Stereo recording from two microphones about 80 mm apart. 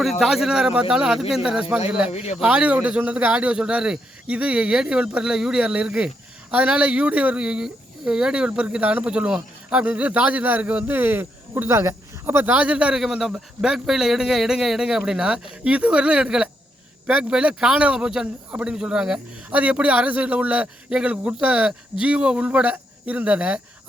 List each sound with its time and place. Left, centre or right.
0.0 s speech: centre; by 12.5 s right
12.5 s speech: centre